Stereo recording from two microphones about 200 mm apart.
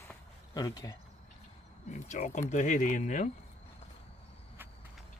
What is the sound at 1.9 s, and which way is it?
Speech, 35° left (ahead or behind).